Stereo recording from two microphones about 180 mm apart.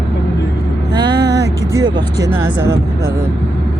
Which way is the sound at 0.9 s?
25° right (ahead or behind).